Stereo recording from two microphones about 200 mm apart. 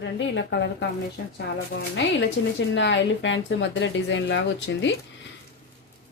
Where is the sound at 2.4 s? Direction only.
70° left (ahead or behind).